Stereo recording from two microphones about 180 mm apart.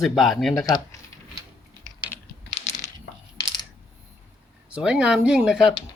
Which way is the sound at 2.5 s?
40° left (ahead or behind).